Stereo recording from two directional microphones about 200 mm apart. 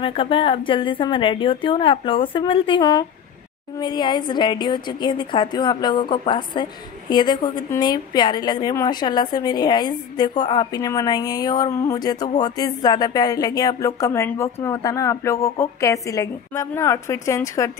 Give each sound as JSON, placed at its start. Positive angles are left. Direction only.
{"t": 0.0, "sound": "a woman's voice", "side_deg": 25}